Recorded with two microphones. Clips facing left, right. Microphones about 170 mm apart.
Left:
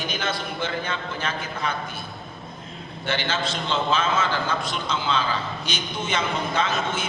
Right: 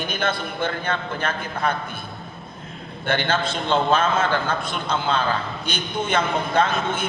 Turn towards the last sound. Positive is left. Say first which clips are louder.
# right 4 dB
turn(degrees=-55)  # may be behind; listen again after turning